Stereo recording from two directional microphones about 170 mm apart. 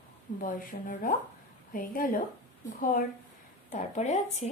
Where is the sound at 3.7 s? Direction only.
45° left (ahead or behind).